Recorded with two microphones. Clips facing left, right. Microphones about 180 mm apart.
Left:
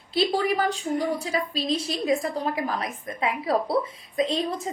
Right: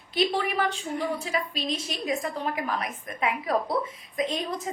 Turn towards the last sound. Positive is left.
turn(degrees=30)  # may be behind; listen again after turning